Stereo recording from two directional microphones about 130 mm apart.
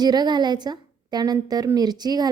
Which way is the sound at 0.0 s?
30° right (ahead or behind).